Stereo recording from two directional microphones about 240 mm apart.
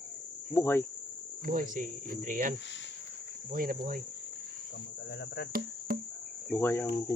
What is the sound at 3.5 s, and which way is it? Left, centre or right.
Cricket, right.